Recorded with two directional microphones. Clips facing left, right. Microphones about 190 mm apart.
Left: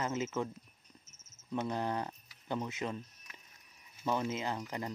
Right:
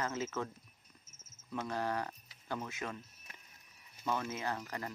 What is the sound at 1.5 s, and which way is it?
Speech, 20° left (ahead or behind).